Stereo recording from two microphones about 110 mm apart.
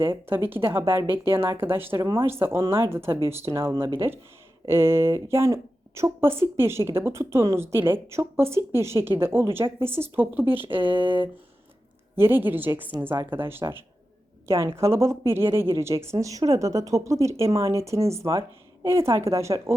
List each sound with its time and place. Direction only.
0.0 s a woman's voice: 20° right (ahead or behind)
3.8 s speech: 50° right (ahead or behind)
4.6 s a woman's voice: 25° right (ahead or behind)
11.0 s speech: 50° right (ahead or behind)
12.1 s a woman's voice: 20° right (ahead or behind)